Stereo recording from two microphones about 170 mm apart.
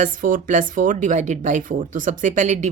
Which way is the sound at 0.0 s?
50° right (ahead or behind).